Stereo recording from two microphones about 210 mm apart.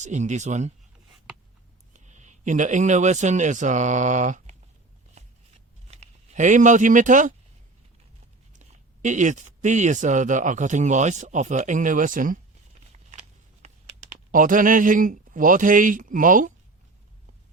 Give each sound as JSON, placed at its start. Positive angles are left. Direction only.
{"t": 0.0, "sound": "speech", "side_deg": -35}
{"t": 1.9, "sound": "a man's voice", "side_deg": -35}
{"t": 5.9, "sound": "speech", "side_deg": -35}
{"t": 8.5, "sound": "speech", "side_deg": -35}
{"t": 12.9, "sound": "a sound", "side_deg": -30}